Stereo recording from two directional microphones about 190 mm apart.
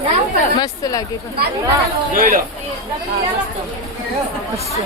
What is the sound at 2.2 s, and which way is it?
Speech, 45° right (ahead or behind).